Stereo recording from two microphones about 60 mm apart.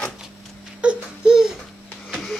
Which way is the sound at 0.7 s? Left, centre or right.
Centre.